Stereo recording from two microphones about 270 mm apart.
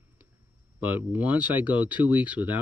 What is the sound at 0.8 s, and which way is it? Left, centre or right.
Speech, centre.